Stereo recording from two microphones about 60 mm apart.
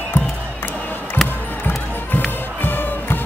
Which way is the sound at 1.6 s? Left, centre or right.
Left.